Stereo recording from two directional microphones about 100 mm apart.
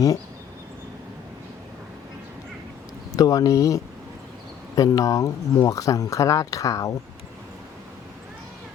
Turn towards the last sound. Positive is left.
turn(degrees=35)  # may be behind; listen again after turning